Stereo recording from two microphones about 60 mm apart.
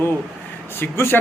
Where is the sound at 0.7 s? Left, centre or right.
Left.